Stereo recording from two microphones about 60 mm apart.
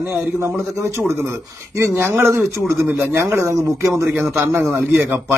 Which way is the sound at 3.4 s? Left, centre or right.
Right.